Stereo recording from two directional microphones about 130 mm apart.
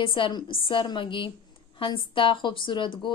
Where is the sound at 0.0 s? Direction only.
40° left (ahead or behind).